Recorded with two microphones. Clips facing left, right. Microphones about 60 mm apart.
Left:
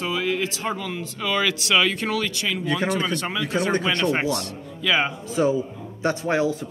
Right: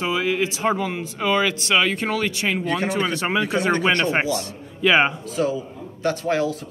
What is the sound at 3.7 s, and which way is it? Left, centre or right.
Speech, right.